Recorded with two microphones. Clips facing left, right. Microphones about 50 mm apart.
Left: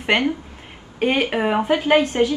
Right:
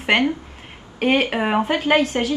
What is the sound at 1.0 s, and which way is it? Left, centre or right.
Speech, centre.